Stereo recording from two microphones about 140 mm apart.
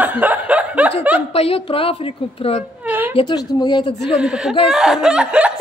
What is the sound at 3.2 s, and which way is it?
Speech, 30° left (ahead or behind).